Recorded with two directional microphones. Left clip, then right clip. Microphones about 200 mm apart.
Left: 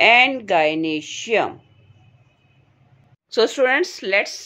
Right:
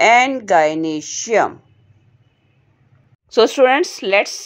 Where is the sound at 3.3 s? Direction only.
30° right (ahead or behind).